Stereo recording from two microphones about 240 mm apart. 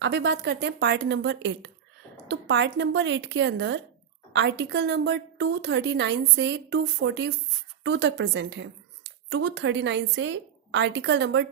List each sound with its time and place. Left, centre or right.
0.0 s a woman's voice: right